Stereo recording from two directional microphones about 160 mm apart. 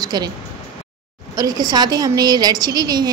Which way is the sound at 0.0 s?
25° right (ahead or behind).